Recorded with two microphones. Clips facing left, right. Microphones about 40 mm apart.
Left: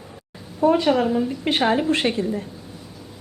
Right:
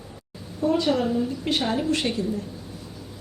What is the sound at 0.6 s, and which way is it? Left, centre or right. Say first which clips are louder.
A woman's voice: left 5 dB; left.